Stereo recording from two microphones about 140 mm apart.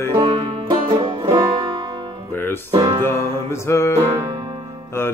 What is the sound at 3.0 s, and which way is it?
Music, 20° left (ahead or behind).